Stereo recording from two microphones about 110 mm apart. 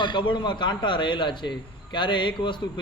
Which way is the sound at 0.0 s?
45° left (ahead or behind).